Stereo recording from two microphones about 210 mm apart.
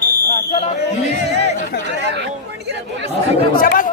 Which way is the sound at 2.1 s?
55° right (ahead or behind).